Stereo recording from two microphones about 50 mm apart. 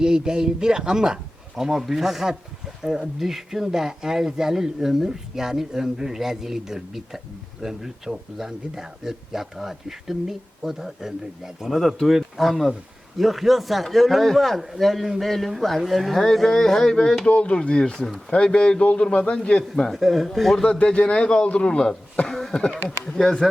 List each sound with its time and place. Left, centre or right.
0.0 s a man's voice: centre
17.9 s speech: centre
18.3 s a man's voice: centre
19.9 s speech: centre
20.7 s a man's voice: left
22.3 s speech: centre
22.5 s speech: centre